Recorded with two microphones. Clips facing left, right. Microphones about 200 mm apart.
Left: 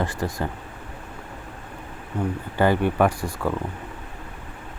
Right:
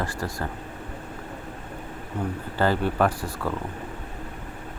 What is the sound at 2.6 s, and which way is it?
Speech, 15° left (ahead or behind).